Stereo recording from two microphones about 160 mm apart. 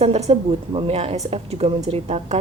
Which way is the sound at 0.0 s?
40° right (ahead or behind).